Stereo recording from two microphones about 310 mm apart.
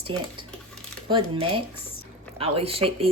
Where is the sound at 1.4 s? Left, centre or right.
Centre.